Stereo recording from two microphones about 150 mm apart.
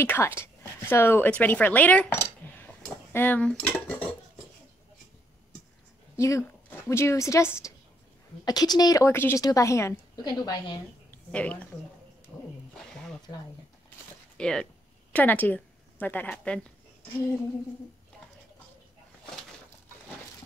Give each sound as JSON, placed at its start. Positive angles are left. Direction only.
{"t": 0.0, "sound": "speech", "side_deg": 15}
{"t": 6.1, "sound": "a woman's voice", "side_deg": 20}
{"t": 11.1, "sound": "a woman's voice", "side_deg": 10}
{"t": 12.3, "sound": "wild animals", "side_deg": 20}
{"t": 14.3, "sound": "a woman's voice", "side_deg": 5}